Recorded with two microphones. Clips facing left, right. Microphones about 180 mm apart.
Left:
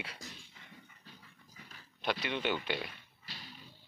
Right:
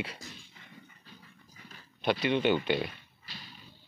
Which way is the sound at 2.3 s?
25° right (ahead or behind).